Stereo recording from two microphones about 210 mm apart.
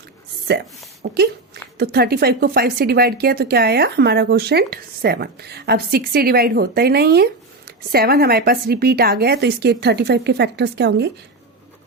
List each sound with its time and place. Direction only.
0.5 s speech: 50° right (ahead or behind)